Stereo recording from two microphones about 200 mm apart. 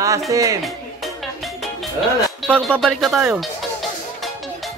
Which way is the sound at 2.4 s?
5° left (ahead or behind).